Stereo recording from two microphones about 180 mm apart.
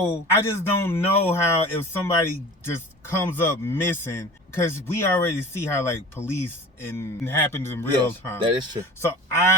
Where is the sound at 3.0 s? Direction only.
15° left (ahead or behind).